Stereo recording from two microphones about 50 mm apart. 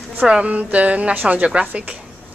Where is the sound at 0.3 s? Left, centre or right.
Right.